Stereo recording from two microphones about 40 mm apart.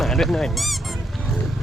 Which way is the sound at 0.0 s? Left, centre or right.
Centre.